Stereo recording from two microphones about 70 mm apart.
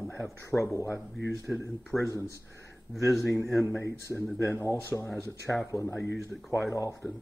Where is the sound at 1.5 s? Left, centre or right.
Centre.